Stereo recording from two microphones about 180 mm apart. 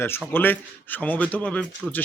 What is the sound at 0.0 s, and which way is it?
A man's voice, 10° left (ahead or behind).